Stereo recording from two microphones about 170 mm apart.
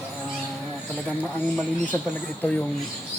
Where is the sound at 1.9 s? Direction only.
15° left (ahead or behind).